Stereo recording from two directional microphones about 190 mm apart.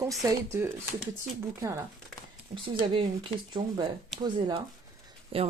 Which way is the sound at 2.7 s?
25° right (ahead or behind).